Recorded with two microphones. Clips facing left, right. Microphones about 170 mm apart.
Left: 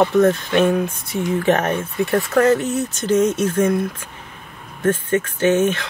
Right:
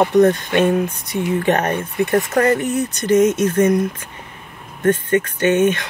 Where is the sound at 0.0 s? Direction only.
15° right (ahead or behind).